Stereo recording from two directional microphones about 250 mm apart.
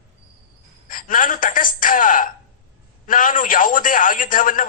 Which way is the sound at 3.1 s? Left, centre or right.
Left.